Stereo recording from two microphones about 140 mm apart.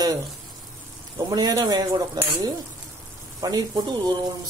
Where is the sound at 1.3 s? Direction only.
30° right (ahead or behind).